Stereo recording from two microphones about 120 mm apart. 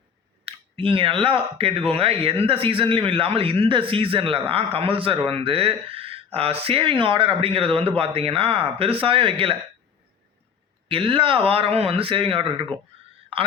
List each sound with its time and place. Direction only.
0.4 s speech: 50° right (ahead or behind)
10.8 s speech: 50° right (ahead or behind)
12.9 s a sound: 55° right (ahead or behind)